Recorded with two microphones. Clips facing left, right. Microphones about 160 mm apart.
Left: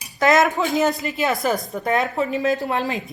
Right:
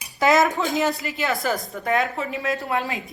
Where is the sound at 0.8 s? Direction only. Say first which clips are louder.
Left 3 dB; 20° left (ahead or behind).